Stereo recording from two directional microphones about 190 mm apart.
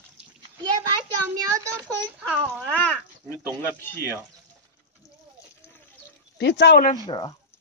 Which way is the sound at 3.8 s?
10° left (ahead or behind).